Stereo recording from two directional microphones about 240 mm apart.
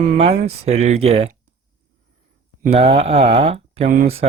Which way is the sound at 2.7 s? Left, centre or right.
Right.